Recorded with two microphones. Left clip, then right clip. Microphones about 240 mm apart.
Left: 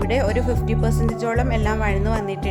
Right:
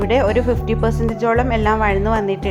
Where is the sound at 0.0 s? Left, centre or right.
Centre.